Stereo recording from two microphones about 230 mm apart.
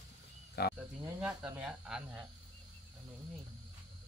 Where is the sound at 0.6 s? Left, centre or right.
Left.